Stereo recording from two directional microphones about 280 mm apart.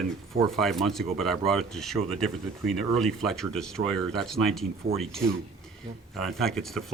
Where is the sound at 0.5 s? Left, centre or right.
Centre.